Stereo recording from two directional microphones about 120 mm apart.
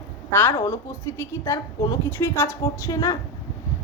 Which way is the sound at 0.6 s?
25° left (ahead or behind).